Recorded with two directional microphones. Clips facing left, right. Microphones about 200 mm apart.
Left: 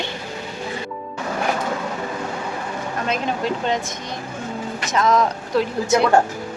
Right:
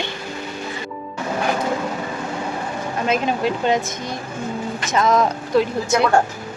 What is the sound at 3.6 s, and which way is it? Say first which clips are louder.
Speech: right 5 dB; 5° right (ahead or behind).